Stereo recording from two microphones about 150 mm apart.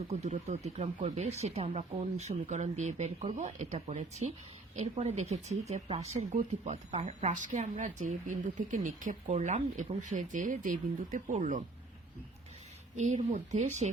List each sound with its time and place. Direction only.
0.1 s speech: 45° right (ahead or behind)
13.0 s speech: 50° right (ahead or behind)